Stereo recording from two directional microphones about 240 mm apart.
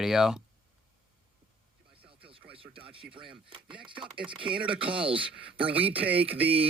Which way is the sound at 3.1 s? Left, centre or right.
Right.